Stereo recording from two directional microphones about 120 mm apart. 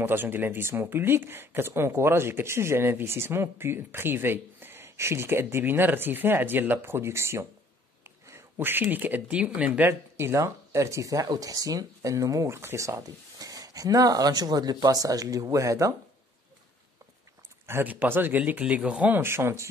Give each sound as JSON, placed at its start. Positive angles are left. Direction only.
{"t": 0.0, "sound": "speech", "side_deg": -15}
{"t": 17.6, "sound": "speech", "side_deg": -15}